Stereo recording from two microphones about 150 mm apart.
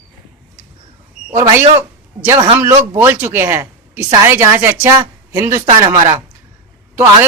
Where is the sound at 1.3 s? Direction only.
20° right (ahead or behind).